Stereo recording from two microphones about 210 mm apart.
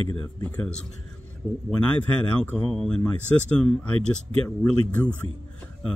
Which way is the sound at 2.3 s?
5° left (ahead or behind).